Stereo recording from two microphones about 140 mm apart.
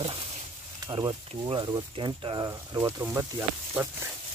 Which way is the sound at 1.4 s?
35° right (ahead or behind).